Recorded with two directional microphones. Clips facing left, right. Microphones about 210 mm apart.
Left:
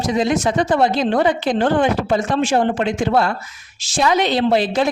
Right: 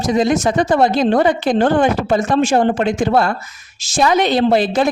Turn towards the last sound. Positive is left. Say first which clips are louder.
# right 2 dB
turn(degrees=-45)  # may be behind; listen again after turning